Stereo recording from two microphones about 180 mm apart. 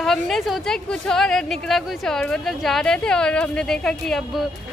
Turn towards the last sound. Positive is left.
turn(degrees=5)  # may be behind; listen again after turning